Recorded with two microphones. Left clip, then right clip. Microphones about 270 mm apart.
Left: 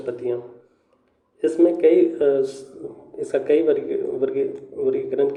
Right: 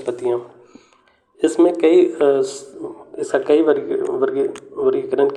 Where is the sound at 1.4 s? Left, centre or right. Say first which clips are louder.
Right 2 dB; right.